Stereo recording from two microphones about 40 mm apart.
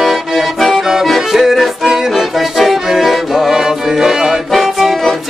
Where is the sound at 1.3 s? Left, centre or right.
Centre.